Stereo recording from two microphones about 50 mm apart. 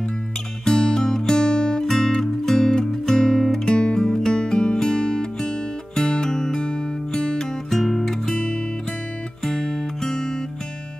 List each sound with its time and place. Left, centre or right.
0.7 s music: centre
1.9 s music: centre
9.4 s music: centre